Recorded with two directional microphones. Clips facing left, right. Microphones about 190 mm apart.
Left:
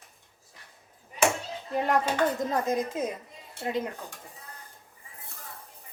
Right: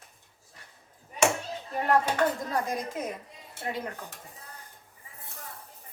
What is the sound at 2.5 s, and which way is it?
Speech, 20° left (ahead or behind).